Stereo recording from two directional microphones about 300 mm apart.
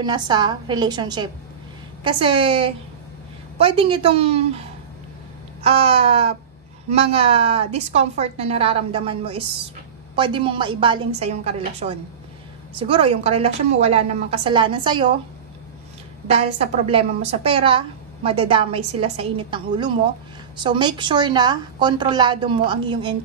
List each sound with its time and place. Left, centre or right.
0.0 s a woman's voice: centre
16.3 s a woman's voice: right